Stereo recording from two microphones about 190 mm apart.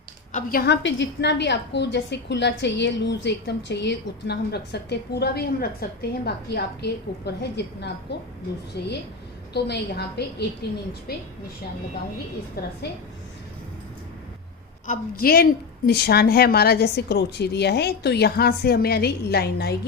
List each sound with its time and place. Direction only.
0.3 s a woman's voice: 55° left (ahead or behind)
12.6 s a woman's voice: 55° left (ahead or behind)
14.8 s a woman's voice: 50° left (ahead or behind)